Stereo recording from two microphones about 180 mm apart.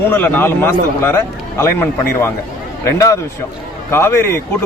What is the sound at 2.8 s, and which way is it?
A man's voice, 15° left (ahead or behind).